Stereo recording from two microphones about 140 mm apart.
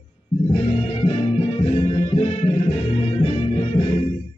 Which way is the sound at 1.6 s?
45° left (ahead or behind).